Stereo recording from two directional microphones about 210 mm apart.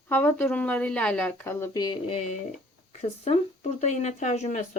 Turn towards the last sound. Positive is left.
turn(degrees=35)  # may be behind; listen again after turning